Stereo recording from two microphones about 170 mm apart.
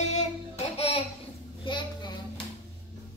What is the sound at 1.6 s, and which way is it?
Child singing, 25° left (ahead or behind).